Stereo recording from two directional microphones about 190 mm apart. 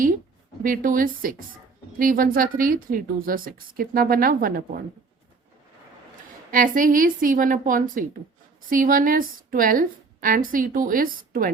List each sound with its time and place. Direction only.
0.6 s a woman's voice: 45° right (ahead or behind)
6.5 s a woman's voice: 45° right (ahead or behind)